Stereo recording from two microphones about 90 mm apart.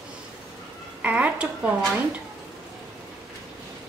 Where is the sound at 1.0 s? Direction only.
15° right (ahead or behind).